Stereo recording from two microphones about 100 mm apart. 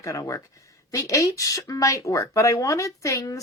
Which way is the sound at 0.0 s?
35° left (ahead or behind).